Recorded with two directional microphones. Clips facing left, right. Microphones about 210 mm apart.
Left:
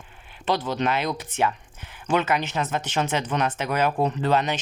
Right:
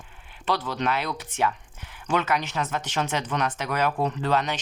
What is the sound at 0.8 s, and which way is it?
Speech, 20° left (ahead or behind).